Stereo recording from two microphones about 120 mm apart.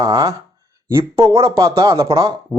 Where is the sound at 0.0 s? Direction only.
25° right (ahead or behind).